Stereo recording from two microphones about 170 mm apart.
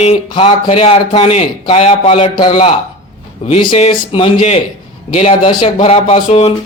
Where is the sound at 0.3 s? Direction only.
30° left (ahead or behind).